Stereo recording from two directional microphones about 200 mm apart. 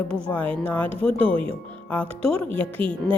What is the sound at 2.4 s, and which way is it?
Speech, 10° left (ahead or behind).